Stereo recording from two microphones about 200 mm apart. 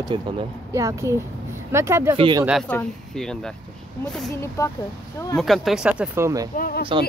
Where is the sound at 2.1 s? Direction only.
25° right (ahead or behind).